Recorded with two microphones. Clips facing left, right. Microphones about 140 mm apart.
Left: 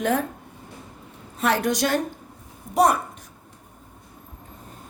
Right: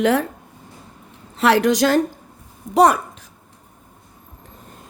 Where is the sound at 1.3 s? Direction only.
90° right.